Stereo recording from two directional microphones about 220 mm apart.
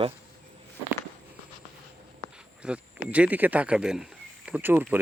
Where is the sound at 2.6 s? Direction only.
5° right (ahead or behind).